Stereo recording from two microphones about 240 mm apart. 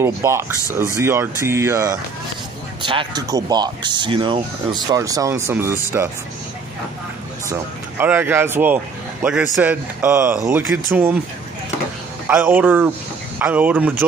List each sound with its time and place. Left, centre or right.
0.0 s a man's voice: centre
8.0 s a man's voice: centre
12.3 s a man's voice: centre